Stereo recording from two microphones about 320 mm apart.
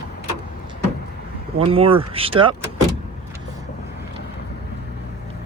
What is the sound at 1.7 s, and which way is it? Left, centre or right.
Speech, centre.